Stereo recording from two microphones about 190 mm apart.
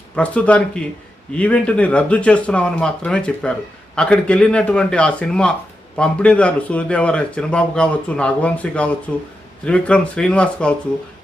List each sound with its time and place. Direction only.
0.2 s speech: 5° left (ahead or behind)